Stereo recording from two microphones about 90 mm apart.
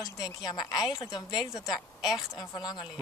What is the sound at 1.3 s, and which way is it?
Speech, 5° right (ahead or behind).